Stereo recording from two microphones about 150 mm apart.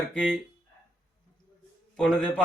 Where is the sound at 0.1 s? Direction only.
10° left (ahead or behind).